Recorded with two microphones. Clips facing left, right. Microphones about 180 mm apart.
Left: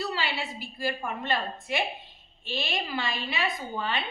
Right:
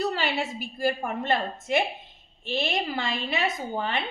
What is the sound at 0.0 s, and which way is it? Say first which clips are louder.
A woman's voice: right 5 dB; 45° right (ahead or behind).